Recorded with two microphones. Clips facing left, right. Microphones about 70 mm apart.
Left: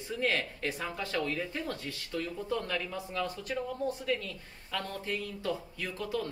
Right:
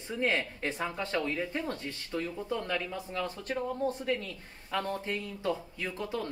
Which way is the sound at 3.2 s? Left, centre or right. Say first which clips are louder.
Right 1 dB; right.